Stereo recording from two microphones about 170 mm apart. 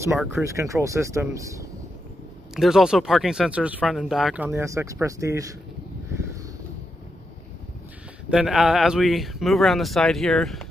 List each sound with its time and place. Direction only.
0.3 s speech: 15° right (ahead or behind)
2.5 s speech: centre (ahead or behind)
4.5 s speech: 15° right (ahead or behind)
8.3 s speech: 5° right (ahead or behind)